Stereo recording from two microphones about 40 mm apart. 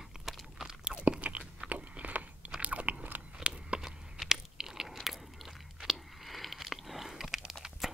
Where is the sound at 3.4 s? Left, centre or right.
Right.